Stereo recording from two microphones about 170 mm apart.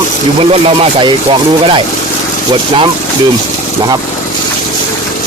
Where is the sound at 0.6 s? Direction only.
30° right (ahead or behind).